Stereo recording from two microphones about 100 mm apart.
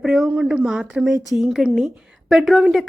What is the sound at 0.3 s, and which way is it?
A woman's voice, 10° right (ahead or behind).